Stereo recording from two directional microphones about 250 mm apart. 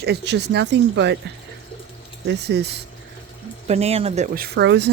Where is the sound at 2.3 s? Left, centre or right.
Right.